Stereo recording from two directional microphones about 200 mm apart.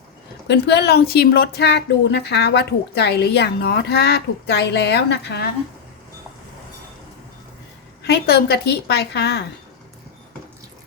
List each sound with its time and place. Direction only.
0.4 s a woman's voice: 60° left (ahead or behind)
8.0 s a woman's voice: 55° left (ahead or behind)